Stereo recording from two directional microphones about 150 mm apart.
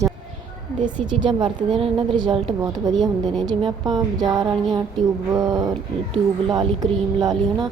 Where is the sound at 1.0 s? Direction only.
40° right (ahead or behind).